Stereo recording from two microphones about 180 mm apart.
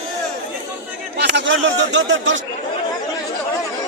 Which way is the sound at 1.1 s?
80° right.